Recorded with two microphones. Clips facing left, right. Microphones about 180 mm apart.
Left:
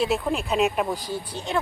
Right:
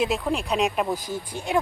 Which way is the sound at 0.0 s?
Centre (ahead or behind).